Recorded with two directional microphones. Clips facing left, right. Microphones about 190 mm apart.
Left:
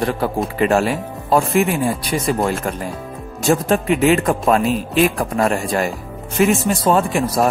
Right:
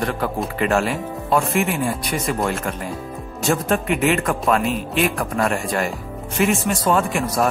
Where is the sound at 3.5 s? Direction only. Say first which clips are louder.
Left 4 dB; 35° left (ahead or behind).